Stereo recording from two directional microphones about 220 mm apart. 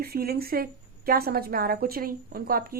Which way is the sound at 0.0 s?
45° right (ahead or behind).